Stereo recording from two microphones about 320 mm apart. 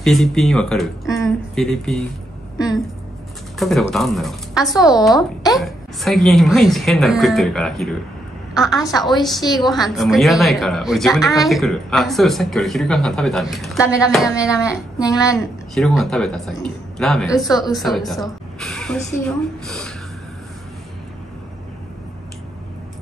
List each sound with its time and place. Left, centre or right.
0.0 s speech: centre
3.5 s speech: centre
15.0 s a woman's voice: centre
15.3 s speech: centre